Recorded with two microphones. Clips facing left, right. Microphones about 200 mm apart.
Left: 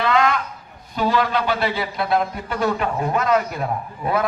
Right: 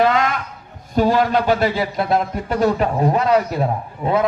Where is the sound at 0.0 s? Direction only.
45° right (ahead or behind).